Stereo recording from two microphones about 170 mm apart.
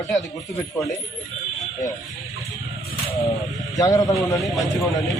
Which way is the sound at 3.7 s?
20° left (ahead or behind).